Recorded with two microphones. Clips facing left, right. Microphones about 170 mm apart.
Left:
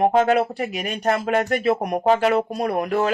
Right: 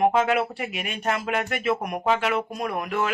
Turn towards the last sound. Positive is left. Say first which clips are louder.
# left 5 dB
turn(degrees=35)  # may be behind; listen again after turning